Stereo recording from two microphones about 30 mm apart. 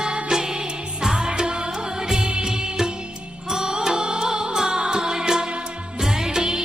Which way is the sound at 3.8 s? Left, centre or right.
Right.